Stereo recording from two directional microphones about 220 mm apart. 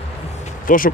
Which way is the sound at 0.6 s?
40° left (ahead or behind).